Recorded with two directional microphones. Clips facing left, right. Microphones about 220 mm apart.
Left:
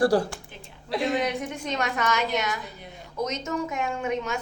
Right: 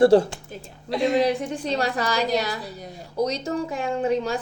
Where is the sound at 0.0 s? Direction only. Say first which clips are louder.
Right 6 dB; 25° right (ahead or behind).